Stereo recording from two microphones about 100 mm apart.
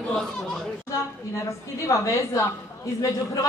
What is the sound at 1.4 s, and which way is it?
A woman's voice, 30° left (ahead or behind).